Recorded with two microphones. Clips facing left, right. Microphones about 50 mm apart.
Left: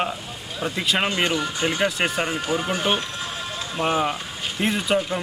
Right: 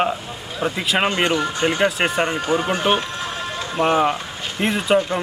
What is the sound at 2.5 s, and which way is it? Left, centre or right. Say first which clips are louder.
Speech: right 5 dB; right.